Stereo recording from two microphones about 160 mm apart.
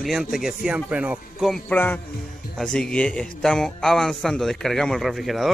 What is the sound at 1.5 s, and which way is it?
A man's voice, 10° left (ahead or behind).